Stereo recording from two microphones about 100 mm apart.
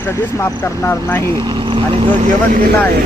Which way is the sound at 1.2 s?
45° right (ahead or behind).